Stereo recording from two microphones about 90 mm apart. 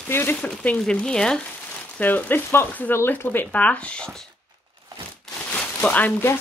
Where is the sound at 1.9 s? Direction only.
20° left (ahead or behind).